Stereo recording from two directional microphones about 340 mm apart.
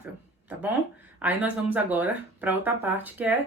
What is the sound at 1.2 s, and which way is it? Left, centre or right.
Speech, centre.